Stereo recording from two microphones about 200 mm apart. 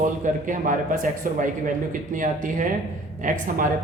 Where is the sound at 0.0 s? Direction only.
40° right (ahead or behind).